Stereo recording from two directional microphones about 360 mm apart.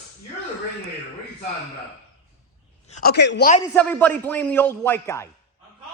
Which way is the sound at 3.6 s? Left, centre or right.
Centre.